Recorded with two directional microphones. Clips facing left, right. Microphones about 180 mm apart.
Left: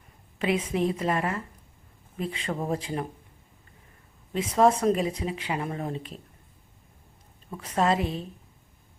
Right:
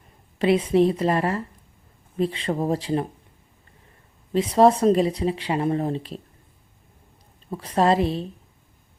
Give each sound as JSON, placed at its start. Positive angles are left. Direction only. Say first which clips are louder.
{"t": 0.3, "sound": "speech", "louder": "right 8 dB", "side_deg": -35}
{"t": 4.3, "sound": "speech", "louder": "right 5 dB", "side_deg": -35}
{"t": 7.5, "sound": "speech", "louder": "right 5 dB", "side_deg": -35}